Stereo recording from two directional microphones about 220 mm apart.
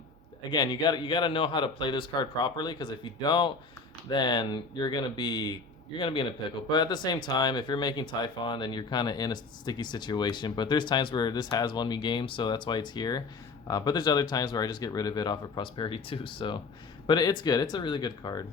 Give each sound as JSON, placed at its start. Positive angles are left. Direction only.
{"t": 0.5, "sound": "speech", "side_deg": 20}